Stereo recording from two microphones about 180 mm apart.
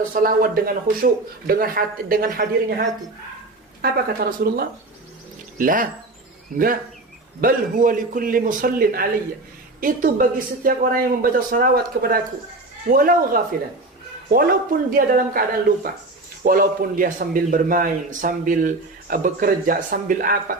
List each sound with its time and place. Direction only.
0.1 s a man's voice: 55° right (ahead or behind)
7.4 s a man's voice: 50° right (ahead or behind)